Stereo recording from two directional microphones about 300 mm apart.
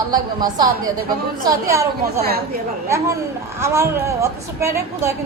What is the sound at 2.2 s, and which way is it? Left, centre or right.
Speech, right.